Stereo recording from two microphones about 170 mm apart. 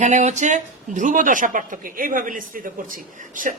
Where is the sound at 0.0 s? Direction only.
45° right (ahead or behind).